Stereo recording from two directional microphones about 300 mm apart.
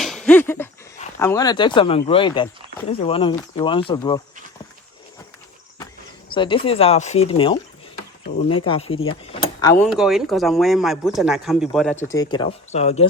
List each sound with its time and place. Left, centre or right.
0.0 s a sound: centre
1.2 s speech: centre
6.3 s speech: centre
9.8 s speech: centre
12.1 s speech: centre